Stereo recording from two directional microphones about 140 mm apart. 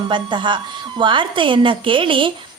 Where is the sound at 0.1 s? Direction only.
35° right (ahead or behind).